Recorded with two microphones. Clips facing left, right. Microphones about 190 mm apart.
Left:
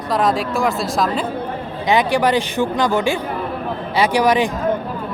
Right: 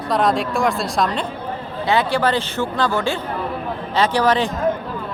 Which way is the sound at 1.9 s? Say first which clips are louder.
Left 2 dB; 15° left (ahead or behind).